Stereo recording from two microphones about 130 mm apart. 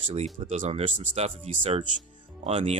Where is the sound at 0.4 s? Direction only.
60° right (ahead or behind).